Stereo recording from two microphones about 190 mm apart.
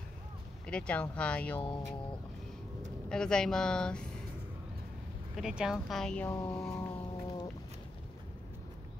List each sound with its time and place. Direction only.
0.7 s speech: 5° left (ahead or behind)
3.1 s speech: 5° left (ahead or behind)
5.3 s speech: 5° right (ahead or behind)
6.2 s a sound: 10° left (ahead or behind)